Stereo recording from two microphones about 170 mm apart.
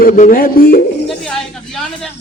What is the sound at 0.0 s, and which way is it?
Music, 50° left (ahead or behind).